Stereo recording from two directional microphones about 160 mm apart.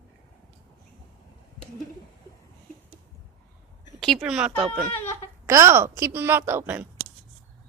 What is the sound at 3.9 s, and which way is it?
Speech, 5° left (ahead or behind).